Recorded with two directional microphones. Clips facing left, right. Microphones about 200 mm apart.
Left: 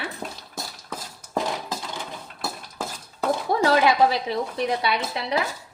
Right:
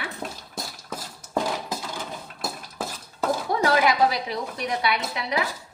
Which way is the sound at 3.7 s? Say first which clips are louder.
Left 2 dB; 25° left (ahead or behind).